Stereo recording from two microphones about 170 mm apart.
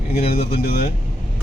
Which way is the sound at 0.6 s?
65° left (ahead or behind).